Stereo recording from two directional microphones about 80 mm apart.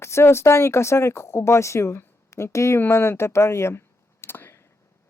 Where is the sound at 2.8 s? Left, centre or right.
Left.